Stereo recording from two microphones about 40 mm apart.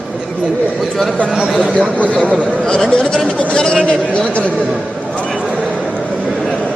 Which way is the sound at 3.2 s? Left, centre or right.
Left.